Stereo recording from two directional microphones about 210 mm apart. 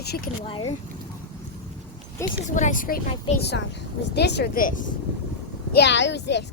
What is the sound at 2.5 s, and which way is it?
A woman's voice, 40° left (ahead or behind).